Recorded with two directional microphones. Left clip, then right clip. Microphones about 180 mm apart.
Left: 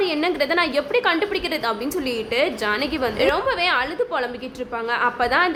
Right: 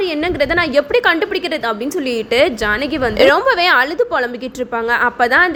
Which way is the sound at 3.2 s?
40° right (ahead or behind).